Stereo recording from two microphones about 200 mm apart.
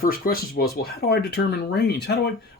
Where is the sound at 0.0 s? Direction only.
45° left (ahead or behind).